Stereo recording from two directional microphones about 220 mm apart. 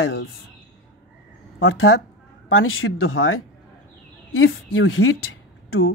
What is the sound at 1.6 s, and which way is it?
Speech, 70° left (ahead or behind).